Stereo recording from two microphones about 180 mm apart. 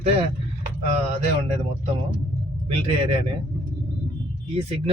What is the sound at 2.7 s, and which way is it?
Speech, 30° right (ahead or behind).